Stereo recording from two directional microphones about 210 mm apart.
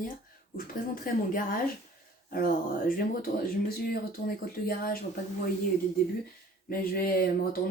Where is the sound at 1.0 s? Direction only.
40° left (ahead or behind).